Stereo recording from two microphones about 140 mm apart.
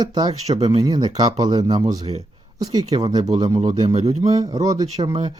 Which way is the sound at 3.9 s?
50° right (ahead or behind).